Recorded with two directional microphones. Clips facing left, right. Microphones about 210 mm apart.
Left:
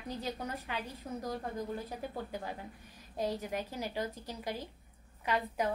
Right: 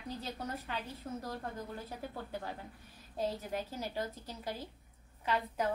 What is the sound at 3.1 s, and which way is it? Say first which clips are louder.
A woman's voice: left 1 dB; 15° left (ahead or behind).